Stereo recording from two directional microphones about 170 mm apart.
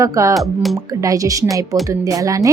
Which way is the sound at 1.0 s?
20° right (ahead or behind).